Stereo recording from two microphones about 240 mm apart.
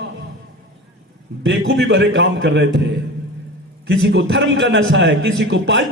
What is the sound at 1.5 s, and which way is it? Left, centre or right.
A man's voice, right.